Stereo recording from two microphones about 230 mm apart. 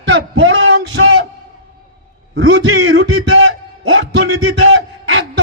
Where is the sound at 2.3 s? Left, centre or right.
Right.